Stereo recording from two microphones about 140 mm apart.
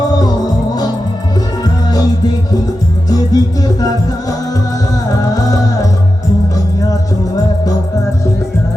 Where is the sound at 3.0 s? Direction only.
25° left (ahead or behind).